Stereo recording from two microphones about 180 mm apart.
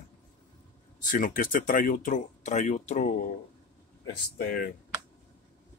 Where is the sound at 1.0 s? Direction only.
50° left (ahead or behind).